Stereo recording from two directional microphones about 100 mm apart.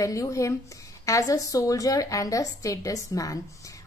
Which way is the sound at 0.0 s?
35° left (ahead or behind).